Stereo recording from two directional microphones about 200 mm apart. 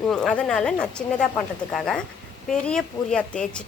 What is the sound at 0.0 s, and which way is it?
Speech, 5° left (ahead or behind).